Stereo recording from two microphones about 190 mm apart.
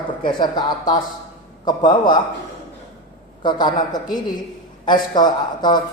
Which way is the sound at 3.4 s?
25° left (ahead or behind).